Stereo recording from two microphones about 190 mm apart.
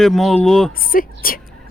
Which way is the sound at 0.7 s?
50° left (ahead or behind).